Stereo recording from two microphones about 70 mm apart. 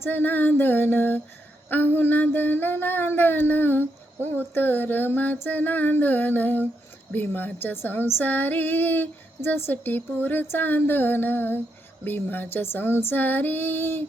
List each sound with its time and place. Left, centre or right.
0.0 s speech: left